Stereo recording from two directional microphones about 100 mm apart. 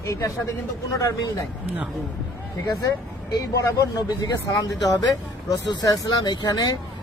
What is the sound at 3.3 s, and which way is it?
A man's voice, 35° left (ahead or behind).